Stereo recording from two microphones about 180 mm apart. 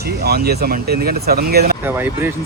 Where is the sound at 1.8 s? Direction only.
10° right (ahead or behind).